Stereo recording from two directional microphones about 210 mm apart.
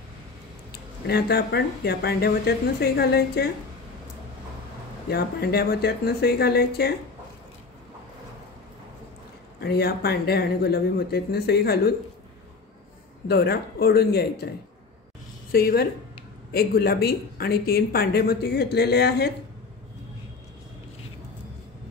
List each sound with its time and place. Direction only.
0.7 s speech: 50° left (ahead or behind)
5.1 s speech: 50° left (ahead or behind)
9.6 s speech: 50° left (ahead or behind)
13.3 s speech: 50° left (ahead or behind)
15.5 s speech: 45° left (ahead or behind)